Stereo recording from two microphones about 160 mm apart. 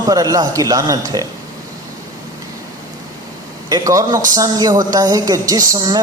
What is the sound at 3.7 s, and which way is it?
A man's voice, 20° right (ahead or behind).